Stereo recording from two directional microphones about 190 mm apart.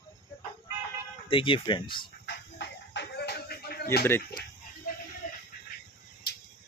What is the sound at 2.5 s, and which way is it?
Music, 60° left (ahead or behind).